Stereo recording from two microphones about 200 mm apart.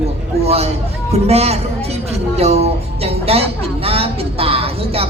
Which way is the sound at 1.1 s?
30° right (ahead or behind).